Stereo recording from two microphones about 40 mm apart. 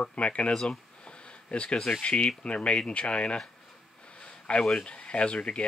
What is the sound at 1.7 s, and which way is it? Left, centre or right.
Speech, centre.